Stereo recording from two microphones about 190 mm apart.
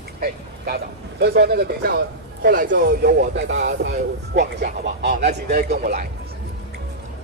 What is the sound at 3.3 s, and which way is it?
A man's voice, 70° right (ahead or behind).